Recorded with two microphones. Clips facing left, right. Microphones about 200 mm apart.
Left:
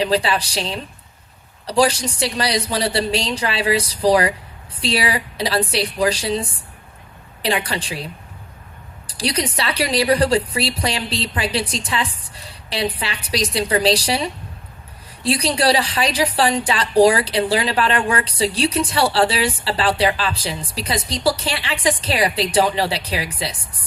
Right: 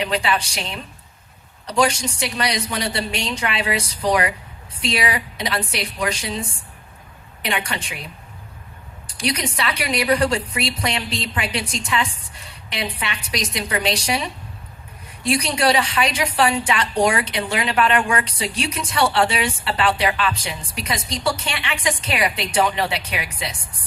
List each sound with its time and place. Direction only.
0.0 s a woman's voice: 30° left (ahead or behind)
9.0 s a sound: 30° left (ahead or behind)
9.6 s a woman's voice: 30° left (ahead or behind)